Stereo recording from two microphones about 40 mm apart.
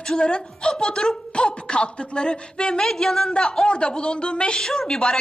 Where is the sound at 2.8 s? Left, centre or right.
Centre.